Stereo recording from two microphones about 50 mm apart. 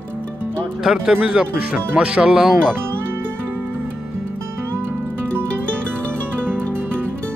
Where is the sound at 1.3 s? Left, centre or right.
Right.